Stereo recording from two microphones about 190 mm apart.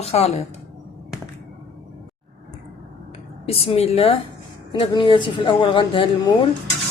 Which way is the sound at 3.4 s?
30° left (ahead or behind).